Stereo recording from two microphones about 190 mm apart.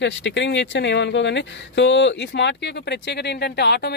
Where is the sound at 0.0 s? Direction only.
70° left (ahead or behind).